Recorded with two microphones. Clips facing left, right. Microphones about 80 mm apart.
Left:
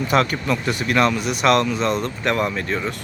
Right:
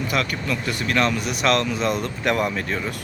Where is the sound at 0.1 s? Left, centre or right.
Left.